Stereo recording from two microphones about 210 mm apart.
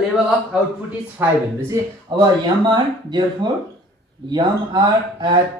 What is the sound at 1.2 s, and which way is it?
Speech, 10° right (ahead or behind).